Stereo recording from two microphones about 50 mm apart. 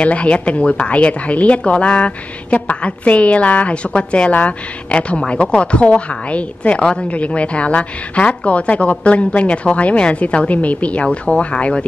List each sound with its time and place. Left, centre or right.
0.0 s a woman's voice: left